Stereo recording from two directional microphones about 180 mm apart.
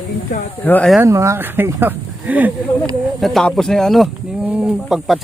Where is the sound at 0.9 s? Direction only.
15° right (ahead or behind).